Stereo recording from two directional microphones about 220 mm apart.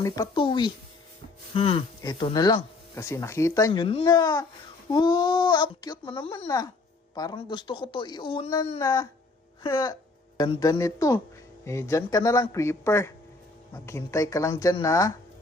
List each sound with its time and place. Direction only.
0.0 s a woman's voice: 20° left (ahead or behind)